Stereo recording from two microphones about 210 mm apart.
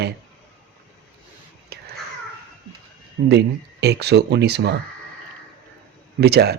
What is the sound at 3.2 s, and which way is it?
Speech, 50° right (ahead or behind).